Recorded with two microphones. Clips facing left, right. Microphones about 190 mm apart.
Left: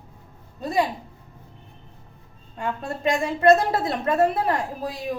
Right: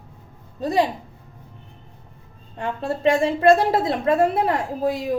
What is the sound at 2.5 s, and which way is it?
A woman's voice, 30° right (ahead or behind).